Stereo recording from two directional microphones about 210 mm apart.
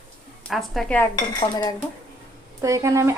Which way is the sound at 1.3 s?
20° left (ahead or behind).